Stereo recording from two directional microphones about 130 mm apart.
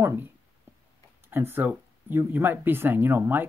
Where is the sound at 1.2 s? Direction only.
15° right (ahead or behind).